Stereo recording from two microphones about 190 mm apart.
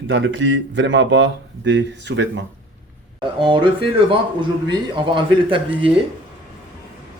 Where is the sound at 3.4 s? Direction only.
25° right (ahead or behind).